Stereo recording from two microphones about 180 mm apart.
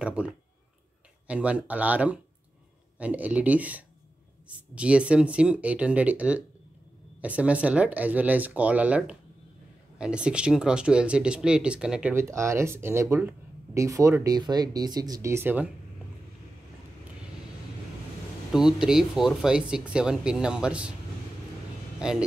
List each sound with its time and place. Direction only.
0.0 s a sound: 5° right (ahead or behind)
1.2 s speech: 5° right (ahead or behind)
18.5 s speech: 5° right (ahead or behind)
22.0 s speech: 5° right (ahead or behind)